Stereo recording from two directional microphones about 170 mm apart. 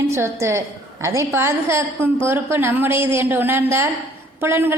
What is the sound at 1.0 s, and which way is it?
A woman's voice, 15° right (ahead or behind).